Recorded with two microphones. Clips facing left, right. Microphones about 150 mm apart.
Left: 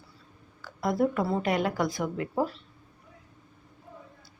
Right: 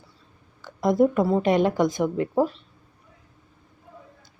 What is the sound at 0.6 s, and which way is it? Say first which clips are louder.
A woman's voice: right 7 dB; 20° right (ahead or behind).